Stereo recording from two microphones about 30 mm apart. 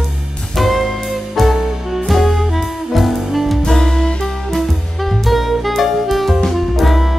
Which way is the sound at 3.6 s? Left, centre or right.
Centre.